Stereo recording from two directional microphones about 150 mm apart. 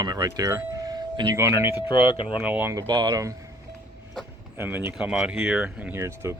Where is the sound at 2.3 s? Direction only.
10° right (ahead or behind).